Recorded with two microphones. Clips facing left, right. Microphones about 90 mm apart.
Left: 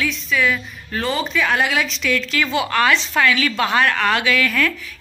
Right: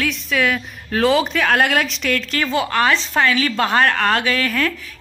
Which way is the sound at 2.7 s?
30° right (ahead or behind).